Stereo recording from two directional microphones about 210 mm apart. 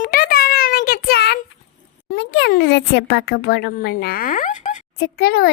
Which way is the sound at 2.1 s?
55° left (ahead or behind).